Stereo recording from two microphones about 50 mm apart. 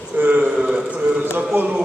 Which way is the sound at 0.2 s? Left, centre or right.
Right.